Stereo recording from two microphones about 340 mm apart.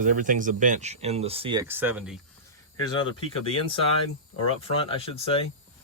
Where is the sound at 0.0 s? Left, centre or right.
Right; by 2.1 s centre.